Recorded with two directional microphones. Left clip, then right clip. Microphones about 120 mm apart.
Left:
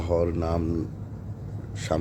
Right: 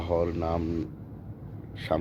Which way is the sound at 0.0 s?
15° left (ahead or behind).